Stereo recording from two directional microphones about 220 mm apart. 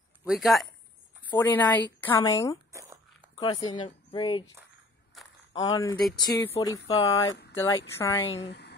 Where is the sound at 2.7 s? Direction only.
15° right (ahead or behind).